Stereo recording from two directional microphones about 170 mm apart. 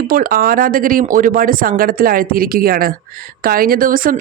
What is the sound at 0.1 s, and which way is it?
Speech, 60° right (ahead or behind).